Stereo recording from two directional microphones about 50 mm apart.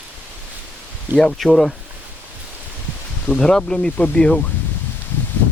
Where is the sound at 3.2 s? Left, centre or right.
Centre.